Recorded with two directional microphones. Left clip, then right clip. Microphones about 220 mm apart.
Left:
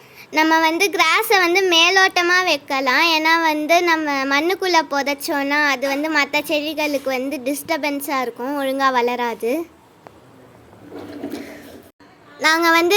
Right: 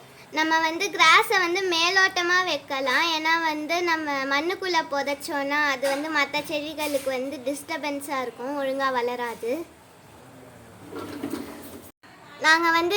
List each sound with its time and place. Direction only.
0.3 s a woman's voice: 40° left (ahead or behind)
12.4 s a woman's voice: 40° left (ahead or behind)